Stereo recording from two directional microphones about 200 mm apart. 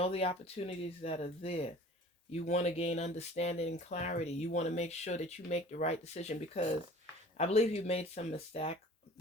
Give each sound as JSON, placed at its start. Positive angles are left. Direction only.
{"t": 0.0, "sound": "speech", "side_deg": 30}